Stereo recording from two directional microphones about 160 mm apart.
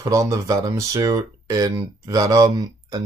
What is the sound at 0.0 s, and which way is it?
Speech, 20° right (ahead or behind).